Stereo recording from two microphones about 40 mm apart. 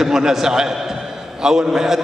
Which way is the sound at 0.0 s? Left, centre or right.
Centre.